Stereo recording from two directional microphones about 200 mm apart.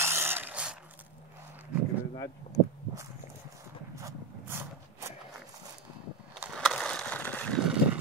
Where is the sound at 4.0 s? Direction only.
15° right (ahead or behind).